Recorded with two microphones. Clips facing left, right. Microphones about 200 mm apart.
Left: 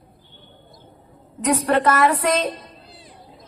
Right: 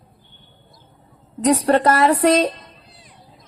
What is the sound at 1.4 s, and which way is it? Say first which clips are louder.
A woman's voice: right 3 dB; 35° right (ahead or behind).